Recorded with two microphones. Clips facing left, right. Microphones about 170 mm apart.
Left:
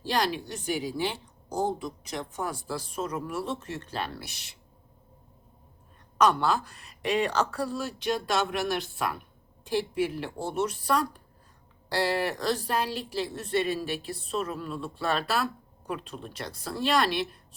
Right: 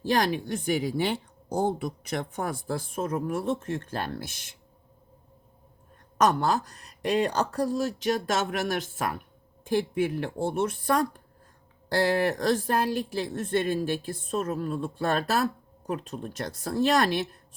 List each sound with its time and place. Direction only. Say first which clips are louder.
0.0 s a woman's voice: right 3 dB; 50° right (ahead or behind)
6.1 s a woman's voice: even; 45° right (ahead or behind)